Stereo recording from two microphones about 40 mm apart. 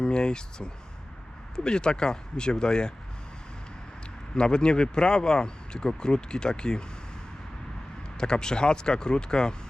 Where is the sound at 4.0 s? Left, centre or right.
Left.